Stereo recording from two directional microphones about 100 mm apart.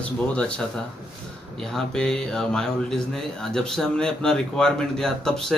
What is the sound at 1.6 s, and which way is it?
Speech, 5° left (ahead or behind).